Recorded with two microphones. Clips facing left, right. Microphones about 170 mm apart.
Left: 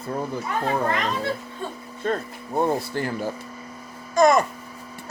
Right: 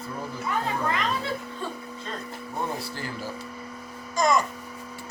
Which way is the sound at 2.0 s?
50° left (ahead or behind).